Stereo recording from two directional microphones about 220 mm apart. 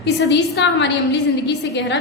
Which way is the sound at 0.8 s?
50° left (ahead or behind).